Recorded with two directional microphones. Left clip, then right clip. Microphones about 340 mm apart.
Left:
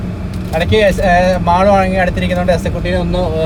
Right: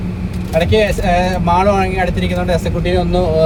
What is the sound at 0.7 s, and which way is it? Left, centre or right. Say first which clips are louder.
Speech: left 6 dB; centre.